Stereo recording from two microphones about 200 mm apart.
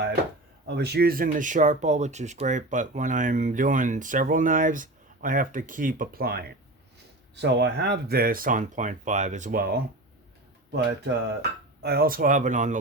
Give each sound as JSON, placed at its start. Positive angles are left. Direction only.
{"t": 0.7, "sound": "speech", "side_deg": -55}